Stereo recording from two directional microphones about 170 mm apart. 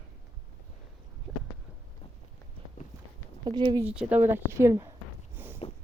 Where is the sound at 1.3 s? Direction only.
Centre (ahead or behind).